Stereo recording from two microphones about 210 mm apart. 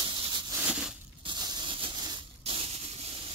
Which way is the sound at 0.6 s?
5° right (ahead or behind).